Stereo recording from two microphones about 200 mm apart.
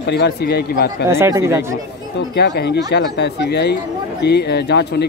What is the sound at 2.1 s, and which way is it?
Speech, 55° left (ahead or behind).